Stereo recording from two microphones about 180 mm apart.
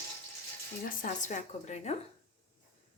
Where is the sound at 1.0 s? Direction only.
45° left (ahead or behind).